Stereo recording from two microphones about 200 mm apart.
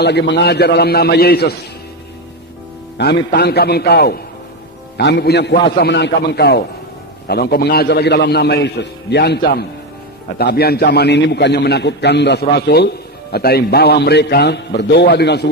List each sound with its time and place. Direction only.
0.0 s a man's voice: 60° left (ahead or behind)
3.3 s a man's voice: 55° left (ahead or behind)